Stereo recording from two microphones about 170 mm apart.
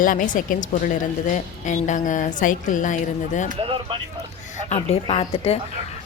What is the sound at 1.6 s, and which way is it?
A woman's voice, 45° left (ahead or behind).